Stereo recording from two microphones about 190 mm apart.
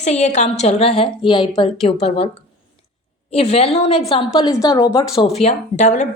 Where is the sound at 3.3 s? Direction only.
30° left (ahead or behind).